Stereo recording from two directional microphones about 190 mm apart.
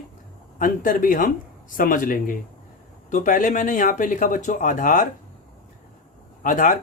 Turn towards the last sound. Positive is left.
turn(degrees=45)  # may be behind; listen again after turning